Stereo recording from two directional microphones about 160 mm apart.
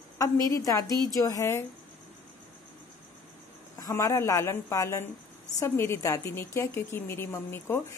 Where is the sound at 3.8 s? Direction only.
15° left (ahead or behind).